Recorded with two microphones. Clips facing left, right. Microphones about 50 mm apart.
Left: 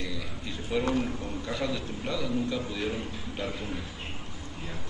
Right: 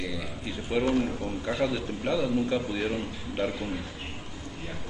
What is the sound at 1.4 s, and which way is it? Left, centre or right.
A man's voice, centre.